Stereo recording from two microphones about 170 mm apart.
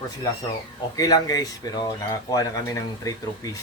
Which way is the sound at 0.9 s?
20° left (ahead or behind).